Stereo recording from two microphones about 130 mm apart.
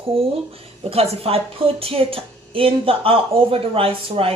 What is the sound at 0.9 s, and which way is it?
Speech, 50° right (ahead or behind).